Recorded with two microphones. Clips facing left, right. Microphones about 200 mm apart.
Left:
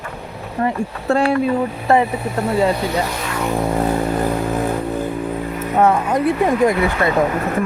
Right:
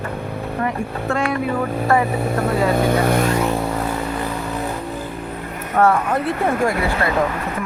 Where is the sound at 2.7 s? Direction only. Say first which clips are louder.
Right 4 dB; 55° right (ahead or behind).